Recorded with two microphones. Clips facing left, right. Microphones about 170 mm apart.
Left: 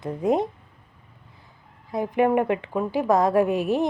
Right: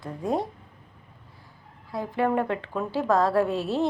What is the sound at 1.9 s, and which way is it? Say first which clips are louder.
A woman's voice: left 4 dB; 20° left (ahead or behind).